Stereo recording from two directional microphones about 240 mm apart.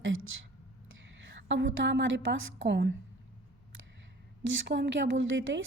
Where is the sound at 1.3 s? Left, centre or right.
Right.